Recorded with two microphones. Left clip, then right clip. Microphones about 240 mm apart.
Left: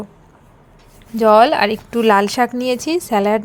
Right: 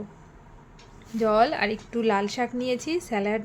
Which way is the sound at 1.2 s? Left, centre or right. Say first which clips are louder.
Left 11 dB; left.